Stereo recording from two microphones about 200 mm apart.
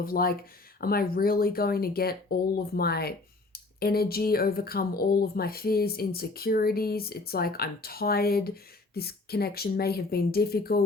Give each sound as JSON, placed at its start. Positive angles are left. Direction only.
{"t": 0.0, "sound": "speech", "side_deg": 45}